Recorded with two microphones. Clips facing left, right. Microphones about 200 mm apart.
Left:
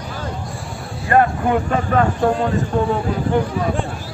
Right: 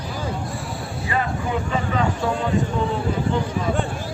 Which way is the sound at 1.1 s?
55° left (ahead or behind).